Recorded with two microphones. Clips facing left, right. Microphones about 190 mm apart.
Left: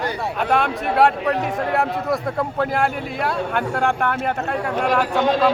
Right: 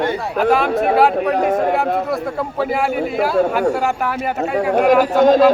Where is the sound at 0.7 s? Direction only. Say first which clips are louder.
Right 4 dB; 55° right (ahead or behind).